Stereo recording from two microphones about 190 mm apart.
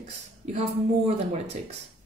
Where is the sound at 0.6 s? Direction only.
35° right (ahead or behind).